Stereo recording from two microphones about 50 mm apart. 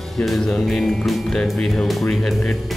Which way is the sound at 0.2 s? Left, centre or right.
Left.